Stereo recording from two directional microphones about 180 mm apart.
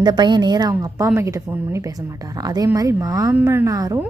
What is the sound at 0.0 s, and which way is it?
A woman's voice, 25° right (ahead or behind).